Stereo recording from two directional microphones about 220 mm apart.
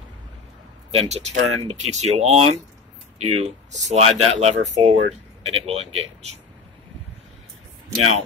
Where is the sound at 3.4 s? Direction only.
30° right (ahead or behind).